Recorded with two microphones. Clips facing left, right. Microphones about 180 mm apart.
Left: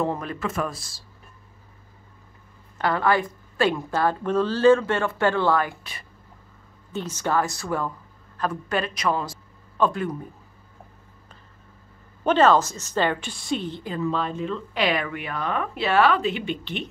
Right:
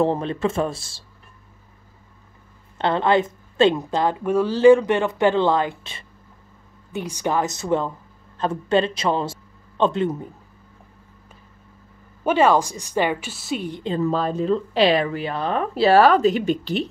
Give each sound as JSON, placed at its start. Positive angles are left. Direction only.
{"t": 0.0, "sound": "a woman's voice", "side_deg": -30}
{"t": 2.8, "sound": "a woman's voice", "side_deg": -25}
{"t": 12.2, "sound": "a woman's voice", "side_deg": -10}
{"t": 14.0, "sound": "speech", "side_deg": -40}